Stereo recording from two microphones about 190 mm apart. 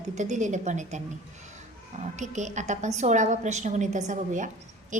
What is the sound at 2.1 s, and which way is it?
A woman's voice, 40° right (ahead or behind).